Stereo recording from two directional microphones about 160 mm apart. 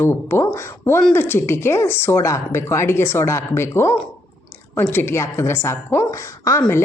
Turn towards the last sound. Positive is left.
turn(degrees=20)  # may be behind; listen again after turning